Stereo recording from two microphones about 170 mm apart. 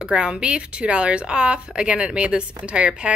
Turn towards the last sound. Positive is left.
turn(degrees=-5)  # may be behind; listen again after turning